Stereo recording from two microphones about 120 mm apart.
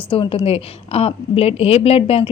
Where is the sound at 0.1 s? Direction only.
50° left (ahead or behind).